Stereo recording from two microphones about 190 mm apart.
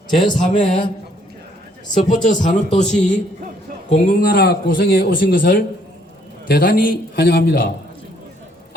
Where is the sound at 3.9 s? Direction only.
45° left (ahead or behind).